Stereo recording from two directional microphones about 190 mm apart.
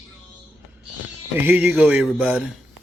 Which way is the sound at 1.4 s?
10° right (ahead or behind).